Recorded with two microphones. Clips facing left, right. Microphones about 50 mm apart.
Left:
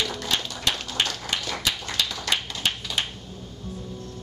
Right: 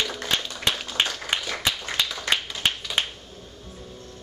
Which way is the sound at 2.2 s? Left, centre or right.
Right.